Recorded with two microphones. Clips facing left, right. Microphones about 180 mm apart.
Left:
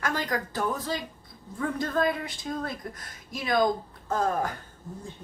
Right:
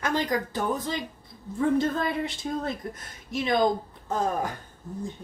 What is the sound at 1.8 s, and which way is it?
Speech, 25° right (ahead or behind).